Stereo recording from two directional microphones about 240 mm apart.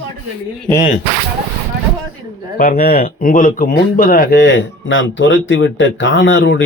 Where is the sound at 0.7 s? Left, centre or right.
Left.